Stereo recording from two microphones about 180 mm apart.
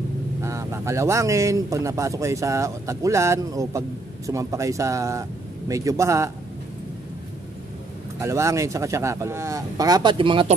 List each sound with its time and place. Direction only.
0.4 s speech: 15° right (ahead or behind)
8.2 s speech: 15° right (ahead or behind)